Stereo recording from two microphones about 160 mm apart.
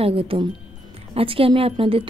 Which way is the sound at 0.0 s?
35° right (ahead or behind).